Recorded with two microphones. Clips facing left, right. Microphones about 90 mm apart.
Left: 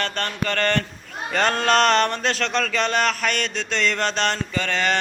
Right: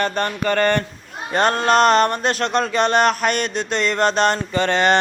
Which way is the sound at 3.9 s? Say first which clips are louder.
Right 6 dB; 45° right (ahead or behind).